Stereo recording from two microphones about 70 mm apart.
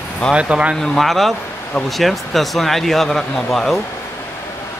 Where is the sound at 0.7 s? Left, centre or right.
Centre.